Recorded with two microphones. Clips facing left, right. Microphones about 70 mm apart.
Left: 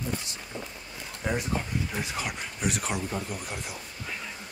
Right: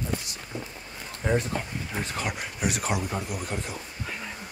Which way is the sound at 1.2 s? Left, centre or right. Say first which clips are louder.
Right 3 dB; centre.